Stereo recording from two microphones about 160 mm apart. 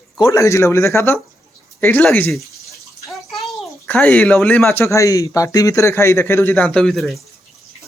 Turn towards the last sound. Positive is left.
turn(degrees=0)  # may be behind; listen again after turning